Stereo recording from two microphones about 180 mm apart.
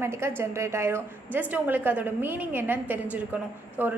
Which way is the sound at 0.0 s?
15° right (ahead or behind).